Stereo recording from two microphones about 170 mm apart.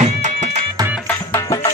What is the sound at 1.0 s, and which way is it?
Music, 15° left (ahead or behind).